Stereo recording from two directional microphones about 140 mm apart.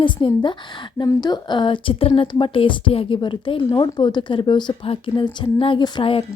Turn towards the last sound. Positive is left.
turn(degrees=35)  # may be behind; listen again after turning